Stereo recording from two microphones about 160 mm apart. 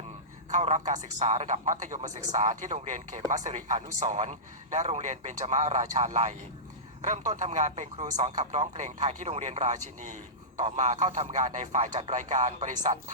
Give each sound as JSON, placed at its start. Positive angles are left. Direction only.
{"t": 0.5, "sound": "a man's voice", "side_deg": -50}